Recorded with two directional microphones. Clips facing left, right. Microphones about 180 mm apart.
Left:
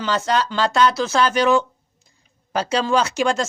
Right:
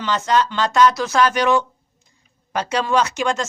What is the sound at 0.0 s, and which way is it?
Speech, 35° left (ahead or behind).